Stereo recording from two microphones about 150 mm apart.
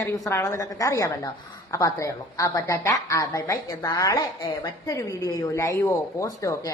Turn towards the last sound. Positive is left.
turn(degrees=25)  # may be behind; listen again after turning